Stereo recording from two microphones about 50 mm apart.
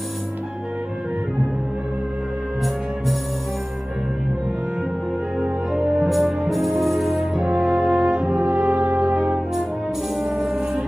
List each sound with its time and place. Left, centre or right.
5.7 s music: centre
6.0 s music: centre
7.3 s music: centre
8.7 s brass instrument: right
10.2 s music: centre